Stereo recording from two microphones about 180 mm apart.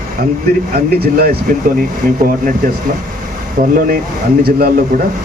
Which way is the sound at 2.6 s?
50° right (ahead or behind).